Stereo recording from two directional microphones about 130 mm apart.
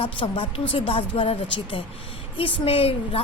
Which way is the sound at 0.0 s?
45° left (ahead or behind).